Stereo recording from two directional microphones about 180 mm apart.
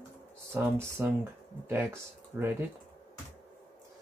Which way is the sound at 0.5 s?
15° right (ahead or behind).